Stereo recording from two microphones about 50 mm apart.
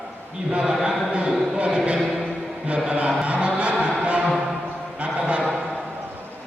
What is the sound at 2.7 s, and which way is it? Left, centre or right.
Speech, centre.